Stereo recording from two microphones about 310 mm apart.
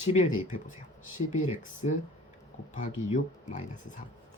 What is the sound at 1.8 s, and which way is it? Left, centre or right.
Speech, left.